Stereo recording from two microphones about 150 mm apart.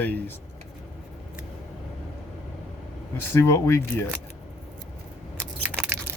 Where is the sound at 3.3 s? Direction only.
20° left (ahead or behind).